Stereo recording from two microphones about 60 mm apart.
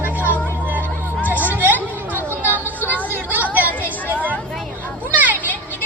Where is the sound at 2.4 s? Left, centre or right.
Left.